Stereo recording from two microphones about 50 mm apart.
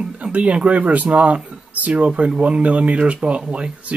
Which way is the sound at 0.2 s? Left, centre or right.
Right.